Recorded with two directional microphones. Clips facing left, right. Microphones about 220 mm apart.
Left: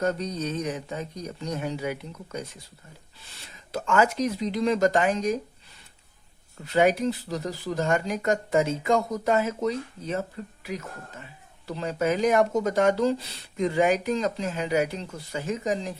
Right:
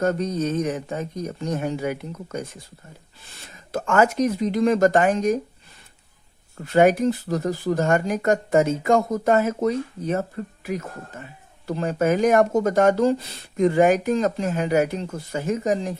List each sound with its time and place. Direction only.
0.0 s speech: 50° right (ahead or behind)
6.7 s speech: 50° right (ahead or behind)